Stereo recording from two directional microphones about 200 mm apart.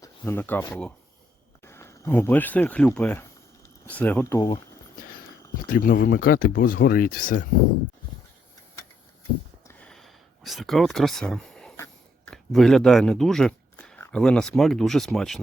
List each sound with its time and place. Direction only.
0.0 s speech: 10° left (ahead or behind)
5.6 s speech: 45° left (ahead or behind)
9.6 s a sound: 5° left (ahead or behind)
12.3 s speech: centre (ahead or behind)